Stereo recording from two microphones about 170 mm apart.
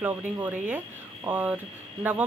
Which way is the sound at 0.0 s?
10° right (ahead or behind).